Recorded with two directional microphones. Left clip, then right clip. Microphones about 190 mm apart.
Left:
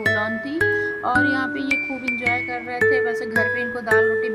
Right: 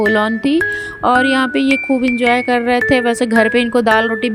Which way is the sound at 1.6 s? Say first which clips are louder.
Right 8 dB; centre (ahead or behind).